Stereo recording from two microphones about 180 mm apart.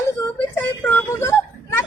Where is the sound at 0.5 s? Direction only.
10° left (ahead or behind).